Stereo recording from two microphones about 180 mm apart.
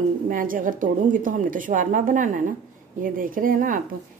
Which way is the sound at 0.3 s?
50° right (ahead or behind).